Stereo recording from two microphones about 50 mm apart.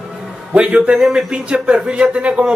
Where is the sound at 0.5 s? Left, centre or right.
Right.